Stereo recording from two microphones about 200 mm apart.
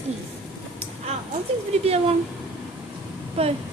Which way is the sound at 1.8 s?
30° right (ahead or behind).